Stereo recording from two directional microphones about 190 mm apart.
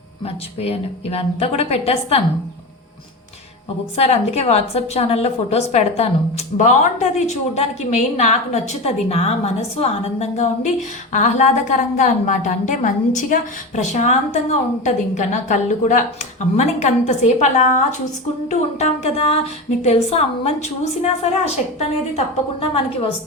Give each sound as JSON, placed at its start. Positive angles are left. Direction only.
{"t": 0.6, "sound": "a woman's voice", "side_deg": 30}
{"t": 3.9, "sound": "a woman's voice", "side_deg": 35}